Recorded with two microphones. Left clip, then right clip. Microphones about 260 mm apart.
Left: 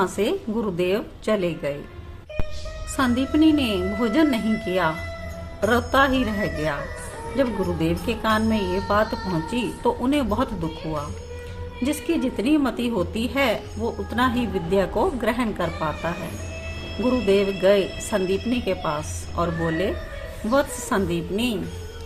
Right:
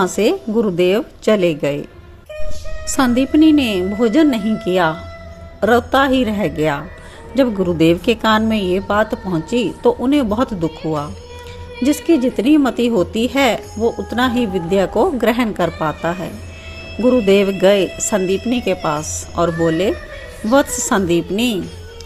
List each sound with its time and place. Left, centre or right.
0.0 s speech: right
2.9 s speech: right